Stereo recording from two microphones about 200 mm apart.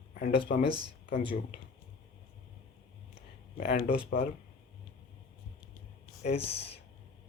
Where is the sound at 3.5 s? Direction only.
50° left (ahead or behind).